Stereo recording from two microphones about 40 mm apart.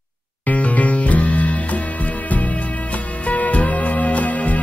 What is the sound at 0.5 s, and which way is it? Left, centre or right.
Music, left.